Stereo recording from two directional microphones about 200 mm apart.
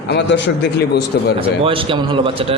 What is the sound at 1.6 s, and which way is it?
Speech, 25° right (ahead or behind).